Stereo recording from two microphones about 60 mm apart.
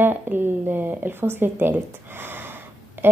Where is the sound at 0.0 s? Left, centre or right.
Right.